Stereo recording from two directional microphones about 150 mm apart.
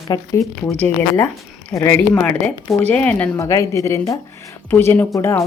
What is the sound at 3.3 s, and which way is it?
Speech, 20° left (ahead or behind).